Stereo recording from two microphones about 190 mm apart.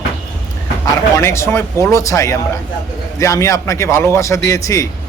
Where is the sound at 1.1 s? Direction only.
15° left (ahead or behind).